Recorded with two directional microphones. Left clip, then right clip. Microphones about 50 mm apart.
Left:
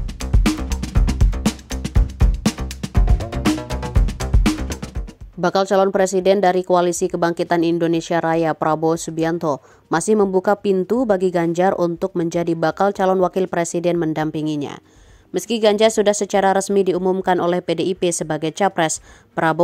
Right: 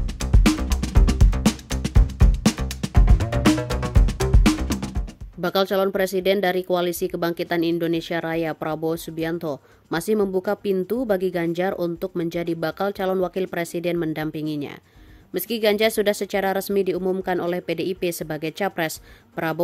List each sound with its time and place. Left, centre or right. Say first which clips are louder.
0.2 s music: even; centre
5.4 s a woman's voice: left 5 dB; left
10.1 s a woman's voice: left 5 dB; left
10.4 s a woman's voice: left 6 dB; left
14.3 s speech: left 5 dB; left
15.3 s speech: left 5 dB; left
17.2 s a woman's voice: left 6 dB; left